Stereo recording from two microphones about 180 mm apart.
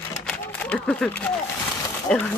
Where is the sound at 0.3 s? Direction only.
5° left (ahead or behind).